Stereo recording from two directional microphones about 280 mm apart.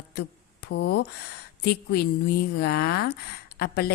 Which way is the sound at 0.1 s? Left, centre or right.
Left.